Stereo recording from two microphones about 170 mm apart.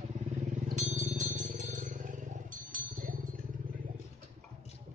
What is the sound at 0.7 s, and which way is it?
Vehicle, 45° right (ahead or behind).